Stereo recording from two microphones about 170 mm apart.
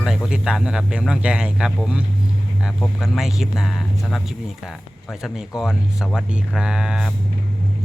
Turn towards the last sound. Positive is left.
turn(degrees=-5)  # may be behind; listen again after turning